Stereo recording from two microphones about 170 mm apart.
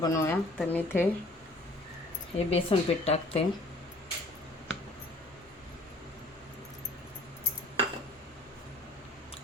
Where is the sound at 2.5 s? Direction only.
35° left (ahead or behind).